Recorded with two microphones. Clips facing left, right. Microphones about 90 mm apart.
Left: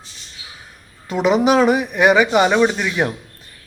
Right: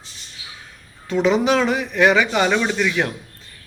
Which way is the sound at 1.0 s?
15° left (ahead or behind).